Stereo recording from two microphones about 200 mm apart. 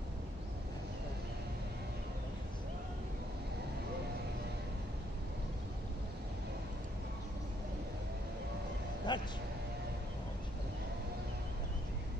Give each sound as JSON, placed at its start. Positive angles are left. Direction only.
{"t": 9.1, "sound": "music", "side_deg": 20}